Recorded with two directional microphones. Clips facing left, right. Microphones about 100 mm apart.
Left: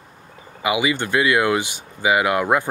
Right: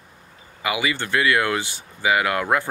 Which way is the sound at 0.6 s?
20° left (ahead or behind).